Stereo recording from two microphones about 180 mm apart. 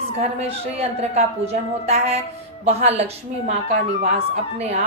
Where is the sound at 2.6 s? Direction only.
35° right (ahead or behind).